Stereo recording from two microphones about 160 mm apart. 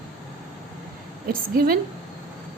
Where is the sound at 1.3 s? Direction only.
65° right (ahead or behind).